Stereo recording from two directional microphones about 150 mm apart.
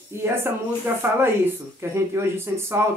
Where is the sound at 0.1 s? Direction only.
15° right (ahead or behind).